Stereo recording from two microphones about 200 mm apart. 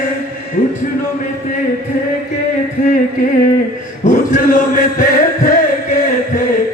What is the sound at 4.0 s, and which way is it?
Chant, 40° left (ahead or behind).